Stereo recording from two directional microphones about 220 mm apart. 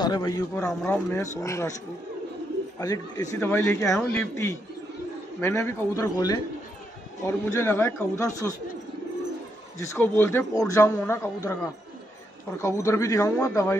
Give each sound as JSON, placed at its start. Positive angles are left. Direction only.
{"t": 0.0, "sound": "a man's voice", "side_deg": 20}
{"t": 0.6, "sound": "speech", "side_deg": 5}
{"t": 2.8, "sound": "speech", "side_deg": 15}
{"t": 9.8, "sound": "speech", "side_deg": 10}
{"t": 12.6, "sound": "speech", "side_deg": 15}